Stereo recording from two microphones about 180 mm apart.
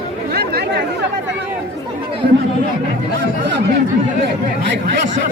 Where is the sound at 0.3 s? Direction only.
60° right (ahead or behind).